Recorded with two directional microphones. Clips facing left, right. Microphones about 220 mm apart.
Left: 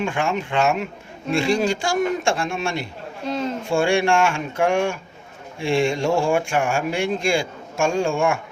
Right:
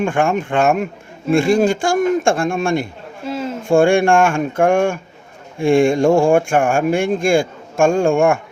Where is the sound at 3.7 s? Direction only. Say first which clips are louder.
Right 7 dB; 50° right (ahead or behind).